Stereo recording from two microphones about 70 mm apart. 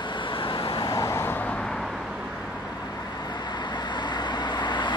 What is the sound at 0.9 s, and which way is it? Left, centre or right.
Vehicle, left.